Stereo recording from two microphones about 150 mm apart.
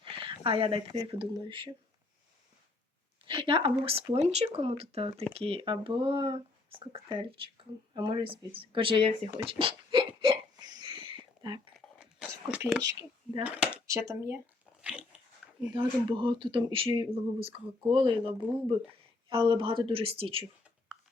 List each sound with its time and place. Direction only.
0.0 s a sound: 35° right (ahead or behind)
1.1 s speech: 35° right (ahead or behind)
3.2 s speech: 35° right (ahead or behind)
9.5 s hiccup: 35° right (ahead or behind)
12.5 s speech: 5° right (ahead or behind)
12.8 s speech: 25° right (ahead or behind)
13.4 s speech: 10° right (ahead or behind)
14.8 s dog: 10° right (ahead or behind)
15.7 s speech: 30° right (ahead or behind)